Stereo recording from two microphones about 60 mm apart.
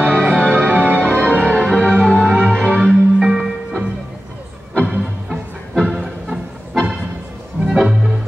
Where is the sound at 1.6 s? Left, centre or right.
Centre.